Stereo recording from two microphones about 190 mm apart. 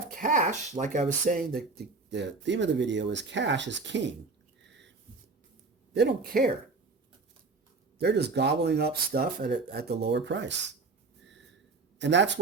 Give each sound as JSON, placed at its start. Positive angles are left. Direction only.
{"t": 0.1, "sound": "speech", "side_deg": -45}
{"t": 5.9, "sound": "speech", "side_deg": -60}
{"t": 7.9, "sound": "speech", "side_deg": -60}
{"t": 11.9, "sound": "speech", "side_deg": -70}